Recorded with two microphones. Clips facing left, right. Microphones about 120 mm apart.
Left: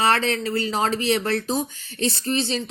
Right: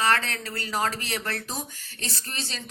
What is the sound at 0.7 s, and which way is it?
Speech, 25° left (ahead or behind).